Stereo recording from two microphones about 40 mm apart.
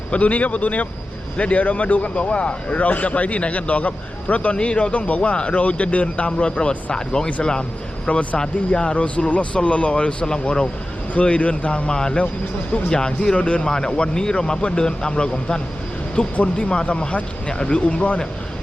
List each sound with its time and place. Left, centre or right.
0.1 s speech: left; by 7.3 s centre
8.0 s speech: left
11.1 s speech: left; by 13.1 s centre
13.4 s speech: left
13.7 s speech: centre
16.2 s speech: left